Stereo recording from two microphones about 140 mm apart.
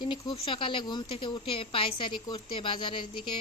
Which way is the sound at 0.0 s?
35° left (ahead or behind).